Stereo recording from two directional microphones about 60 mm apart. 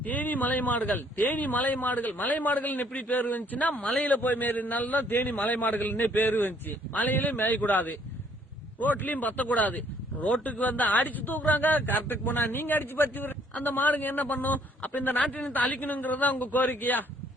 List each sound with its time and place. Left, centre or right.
0.0 s a man's voice: left